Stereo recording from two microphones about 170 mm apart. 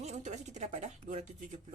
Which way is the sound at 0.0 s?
40° right (ahead or behind).